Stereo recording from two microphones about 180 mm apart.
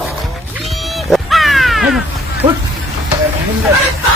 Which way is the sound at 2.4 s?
45° right (ahead or behind).